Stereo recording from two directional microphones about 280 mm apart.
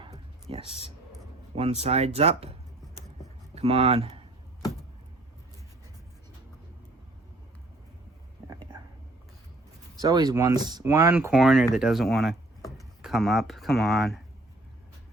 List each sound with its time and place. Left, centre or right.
0.0 s a sound: centre
1.5 s speech: right
3.5 s speech: right
10.0 s speech: centre